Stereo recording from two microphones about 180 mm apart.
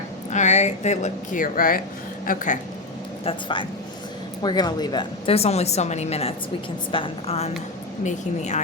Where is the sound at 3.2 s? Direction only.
25° left (ahead or behind).